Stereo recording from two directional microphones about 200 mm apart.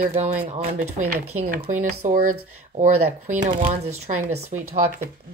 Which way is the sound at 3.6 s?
30° right (ahead or behind).